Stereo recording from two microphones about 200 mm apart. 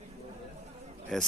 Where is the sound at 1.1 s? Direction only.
Centre (ahead or behind).